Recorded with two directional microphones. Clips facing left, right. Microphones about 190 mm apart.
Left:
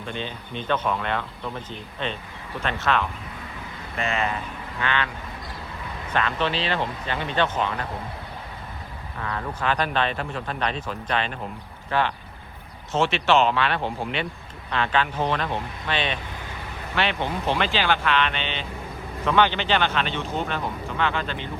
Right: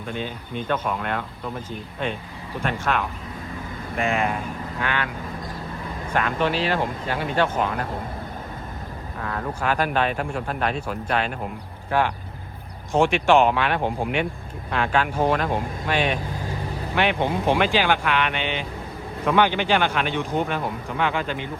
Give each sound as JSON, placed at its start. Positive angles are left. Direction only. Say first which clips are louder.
{"t": 0.1, "sound": "speech", "louder": "right 3 dB", "side_deg": -10}
{"t": 6.1, "sound": "speech", "louder": "right 2 dB", "side_deg": -10}
{"t": 9.2, "sound": "speech", "louder": "right 1 dB", "side_deg": -10}
{"t": 15.4, "sound": "speech", "louder": "right 4 dB", "side_deg": -45}
{"t": 15.9, "sound": "speech", "louder": "right 4 dB", "side_deg": -10}